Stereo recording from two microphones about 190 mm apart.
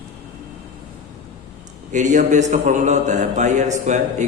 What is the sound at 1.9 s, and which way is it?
A man's voice, 40° right (ahead or behind).